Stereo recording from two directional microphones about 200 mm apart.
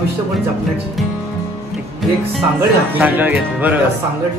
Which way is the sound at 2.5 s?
10° right (ahead or behind).